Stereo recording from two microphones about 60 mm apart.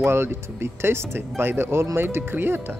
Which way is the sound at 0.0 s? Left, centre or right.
Right.